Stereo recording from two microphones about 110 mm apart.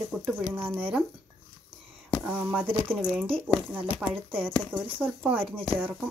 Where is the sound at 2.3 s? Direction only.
15° right (ahead or behind).